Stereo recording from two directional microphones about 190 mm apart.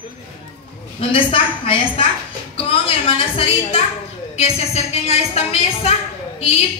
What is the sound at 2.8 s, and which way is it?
A woman's voice, 30° left (ahead or behind).